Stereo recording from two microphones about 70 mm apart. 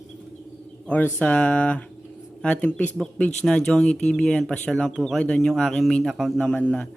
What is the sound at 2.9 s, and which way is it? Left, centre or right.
A man's voice, centre.